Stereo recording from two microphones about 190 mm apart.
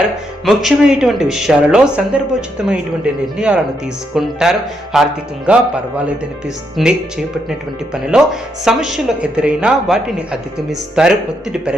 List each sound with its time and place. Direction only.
0.4 s speech: 5° right (ahead or behind)